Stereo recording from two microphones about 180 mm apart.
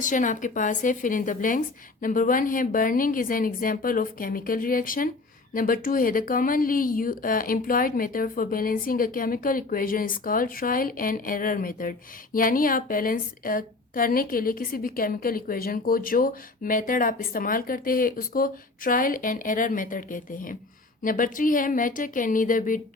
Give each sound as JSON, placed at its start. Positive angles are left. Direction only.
{"t": 0.0, "sound": "speech", "side_deg": 45}